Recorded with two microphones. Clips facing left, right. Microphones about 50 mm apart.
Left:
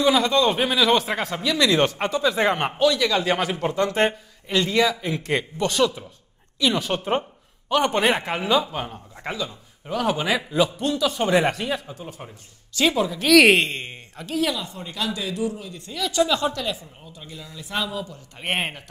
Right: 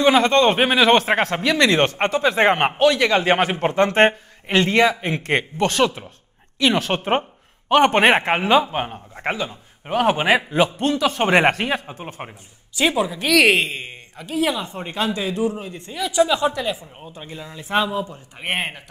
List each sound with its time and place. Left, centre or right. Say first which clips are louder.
0.0 s a man's voice: right 4 dB; right
12.7 s speech: right 1 dB; centre
13.3 s speech: left 2 dB; centre
14.4 s a man's voice: right 4 dB; right
16.0 s speech: right 3 dB; centre
17.0 s a man's voice: right 5 dB; right
18.4 s speech: right 1 dB; centre